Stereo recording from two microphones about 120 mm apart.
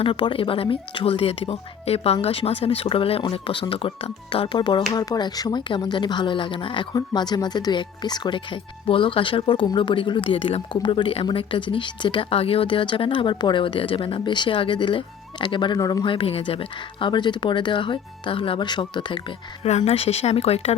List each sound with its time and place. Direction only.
0.0 s a woman's voice: 45° left (ahead or behind)
8.9 s speech: 50° left (ahead or behind)
15.8 s a woman's voice: 30° left (ahead or behind)
16.0 s speech: 50° left (ahead or behind)
19.6 s speech: 65° left (ahead or behind)